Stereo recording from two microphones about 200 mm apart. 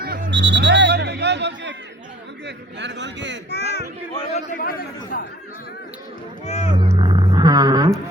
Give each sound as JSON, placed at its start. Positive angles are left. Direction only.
{"t": 0.0, "sound": "music", "side_deg": -55}
{"t": 2.7, "sound": "a man's voice", "side_deg": -60}
{"t": 3.5, "sound": "a sound", "side_deg": 55}
{"t": 4.4, "sound": "chatter", "side_deg": 45}
{"t": 6.4, "sound": "music", "side_deg": 35}
{"t": 6.7, "sound": "a sound", "side_deg": -25}